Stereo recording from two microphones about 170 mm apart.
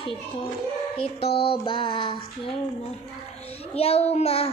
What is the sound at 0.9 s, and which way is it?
A child's voice, 35° left (ahead or behind).